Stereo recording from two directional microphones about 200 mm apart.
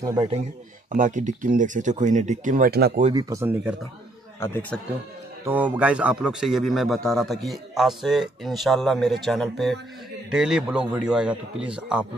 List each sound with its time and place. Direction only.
0.0 s speech: 20° right (ahead or behind)
0.9 s speech: 40° right (ahead or behind)
3.2 s speech: 15° right (ahead or behind)
4.4 s speech: 10° left (ahead or behind)
5.4 s a man's voice: 10° right (ahead or behind)